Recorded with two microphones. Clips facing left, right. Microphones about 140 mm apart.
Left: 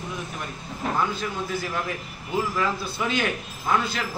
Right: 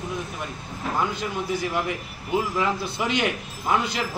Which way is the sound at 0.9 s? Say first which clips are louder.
Right 2 dB; 15° right (ahead or behind).